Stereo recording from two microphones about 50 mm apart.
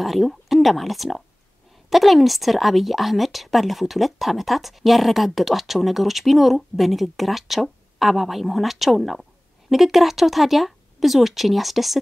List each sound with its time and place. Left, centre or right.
0.0 s speech: centre